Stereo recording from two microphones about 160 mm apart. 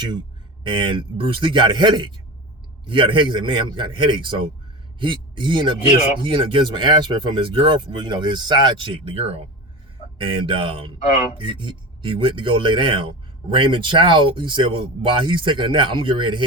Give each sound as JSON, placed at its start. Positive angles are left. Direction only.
{"t": 0.6, "sound": "a man's voice", "side_deg": -30}